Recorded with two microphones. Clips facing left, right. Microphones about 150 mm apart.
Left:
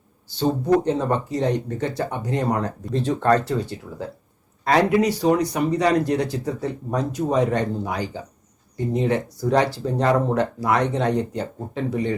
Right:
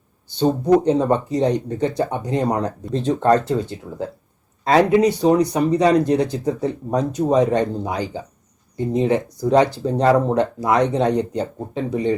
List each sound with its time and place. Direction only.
0.3 s speech: 20° right (ahead or behind)